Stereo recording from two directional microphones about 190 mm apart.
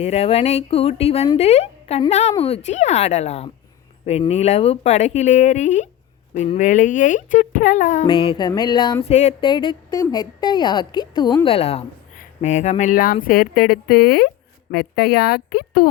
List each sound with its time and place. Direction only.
0.0 s speech: 35° left (ahead or behind)
8.0 s speech: 30° left (ahead or behind)
9.0 s speech: 35° left (ahead or behind)
9.5 s speech: 25° left (ahead or behind); by 15.9 s 55° left (ahead or behind)